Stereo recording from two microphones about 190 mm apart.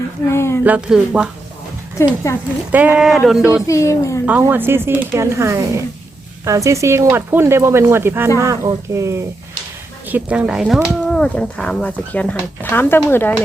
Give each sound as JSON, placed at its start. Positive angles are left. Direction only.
{"t": 0.3, "sound": "a woman's voice", "side_deg": 15}
{"t": 0.6, "sound": "speech", "side_deg": -5}
{"t": 2.3, "sound": "a woman's voice", "side_deg": 15}
{"t": 2.7, "sound": "speech", "side_deg": -5}
{"t": 3.7, "sound": "a woman's voice", "side_deg": 15}
{"t": 4.3, "sound": "speech", "side_deg": -10}